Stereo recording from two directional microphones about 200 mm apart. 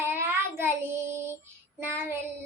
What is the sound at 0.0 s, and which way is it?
Child singing, 10° right (ahead or behind).